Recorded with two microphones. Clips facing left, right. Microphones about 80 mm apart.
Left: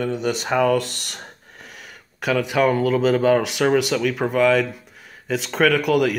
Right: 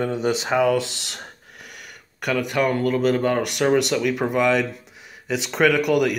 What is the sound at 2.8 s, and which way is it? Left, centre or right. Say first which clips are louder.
Speech: left 2 dB; centre.